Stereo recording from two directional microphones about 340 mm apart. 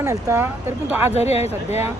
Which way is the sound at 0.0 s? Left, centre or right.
Centre.